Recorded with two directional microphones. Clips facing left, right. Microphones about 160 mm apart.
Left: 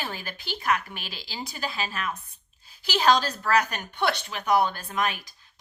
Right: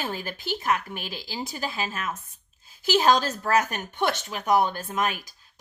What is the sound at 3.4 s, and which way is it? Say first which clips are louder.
Speech: right 1 dB; 45° right (ahead or behind).